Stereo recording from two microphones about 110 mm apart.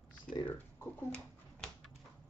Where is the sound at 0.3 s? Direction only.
5° left (ahead or behind).